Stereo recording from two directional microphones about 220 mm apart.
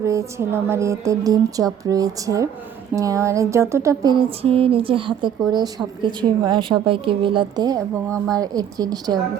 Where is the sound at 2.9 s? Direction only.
15° right (ahead or behind).